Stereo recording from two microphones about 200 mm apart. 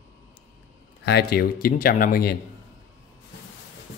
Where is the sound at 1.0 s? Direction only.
55° left (ahead or behind).